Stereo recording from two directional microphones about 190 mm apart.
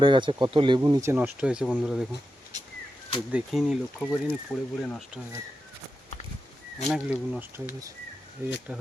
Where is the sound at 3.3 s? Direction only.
Centre (ahead or behind).